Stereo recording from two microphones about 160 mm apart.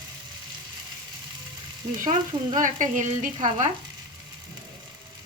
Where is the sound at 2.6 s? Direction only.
55° right (ahead or behind).